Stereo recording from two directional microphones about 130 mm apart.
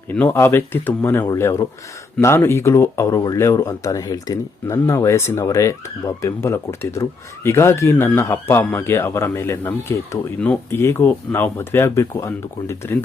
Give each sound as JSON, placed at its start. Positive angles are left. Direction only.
{"t": 0.1, "sound": "speech", "side_deg": 15}